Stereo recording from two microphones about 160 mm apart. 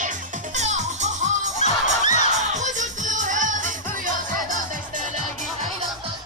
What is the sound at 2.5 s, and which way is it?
Music, 50° right (ahead or behind).